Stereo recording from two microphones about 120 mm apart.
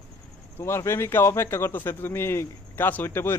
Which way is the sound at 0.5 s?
20° left (ahead or behind).